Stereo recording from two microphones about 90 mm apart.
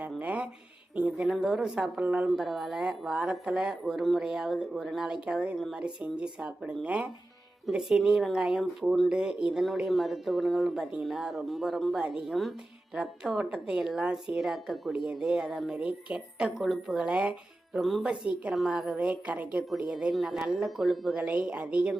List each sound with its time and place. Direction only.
0.2 s a woman's voice: 15° right (ahead or behind)
2.3 s a woman's voice: centre (ahead or behind)
17.7 s speech: centre (ahead or behind)
18.0 s a woman's voice: 10° right (ahead or behind)